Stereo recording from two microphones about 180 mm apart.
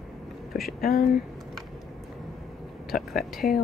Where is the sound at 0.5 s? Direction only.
Centre (ahead or behind).